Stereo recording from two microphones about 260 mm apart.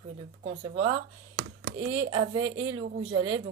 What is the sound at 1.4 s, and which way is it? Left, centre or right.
Computer keyboard, right.